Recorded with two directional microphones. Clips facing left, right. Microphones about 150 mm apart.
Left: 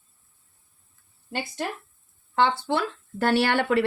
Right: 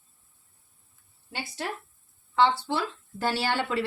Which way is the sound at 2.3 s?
55° left (ahead or behind).